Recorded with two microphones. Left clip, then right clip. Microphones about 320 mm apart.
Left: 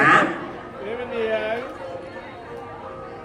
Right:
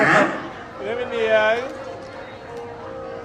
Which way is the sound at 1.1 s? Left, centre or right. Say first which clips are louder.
Right 7 dB; right.